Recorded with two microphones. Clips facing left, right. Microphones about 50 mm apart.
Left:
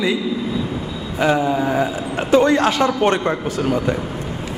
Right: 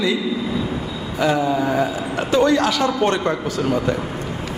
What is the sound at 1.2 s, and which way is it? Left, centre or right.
A man's voice, left.